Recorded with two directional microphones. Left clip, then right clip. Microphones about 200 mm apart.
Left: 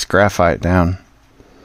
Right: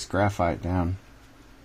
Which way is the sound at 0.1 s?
65° left (ahead or behind).